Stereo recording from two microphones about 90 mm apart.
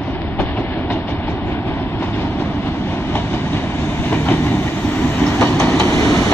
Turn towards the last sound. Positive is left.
turn(degrees=30)  # may be behind; listen again after turning